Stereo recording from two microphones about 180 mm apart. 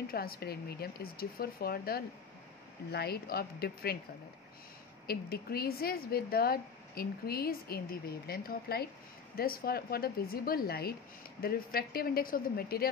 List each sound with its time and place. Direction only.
0.1 s speech: 55° left (ahead or behind)
5.0 s speech: 60° left (ahead or behind)